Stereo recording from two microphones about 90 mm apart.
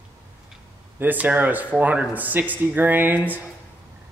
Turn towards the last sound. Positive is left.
turn(degrees=-20)  # may be behind; listen again after turning